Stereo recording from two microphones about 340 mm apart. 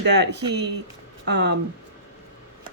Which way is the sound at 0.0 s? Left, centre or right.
Right.